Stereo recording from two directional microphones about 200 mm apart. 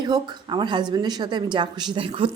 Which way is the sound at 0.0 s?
20° right (ahead or behind).